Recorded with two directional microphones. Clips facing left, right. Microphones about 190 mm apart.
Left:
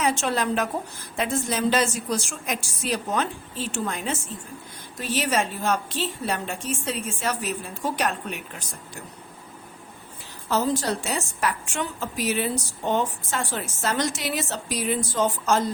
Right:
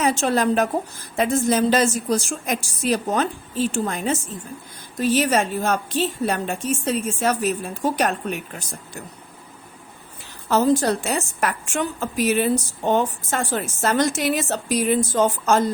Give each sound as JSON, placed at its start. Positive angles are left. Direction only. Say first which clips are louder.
{"t": 0.0, "sound": "a woman's voice", "louder": "right 4 dB", "side_deg": -40}
{"t": 10.5, "sound": "a woman's voice", "louder": "right 6 dB", "side_deg": -50}